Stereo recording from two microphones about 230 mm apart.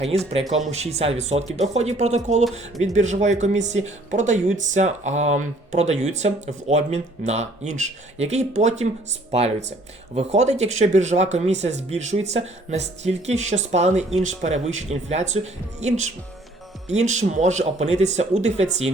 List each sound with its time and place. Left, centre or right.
0.7 s speech: right